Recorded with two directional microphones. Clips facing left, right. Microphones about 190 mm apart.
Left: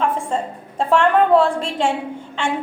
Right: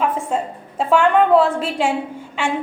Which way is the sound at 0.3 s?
5° right (ahead or behind).